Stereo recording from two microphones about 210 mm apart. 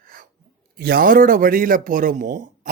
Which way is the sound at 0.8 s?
45° right (ahead or behind).